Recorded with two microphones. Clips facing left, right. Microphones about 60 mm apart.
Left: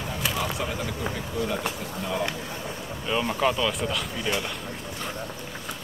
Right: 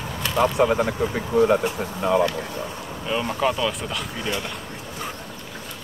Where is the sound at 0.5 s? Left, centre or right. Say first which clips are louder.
Right 11 dB; right.